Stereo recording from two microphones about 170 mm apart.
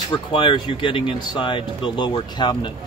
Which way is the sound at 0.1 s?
30° left (ahead or behind).